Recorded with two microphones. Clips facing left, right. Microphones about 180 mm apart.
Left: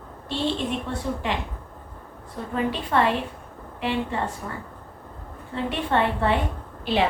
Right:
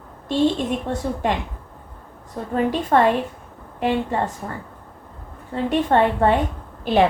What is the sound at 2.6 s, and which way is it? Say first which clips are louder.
A woman's voice: right 5 dB; 45° right (ahead or behind).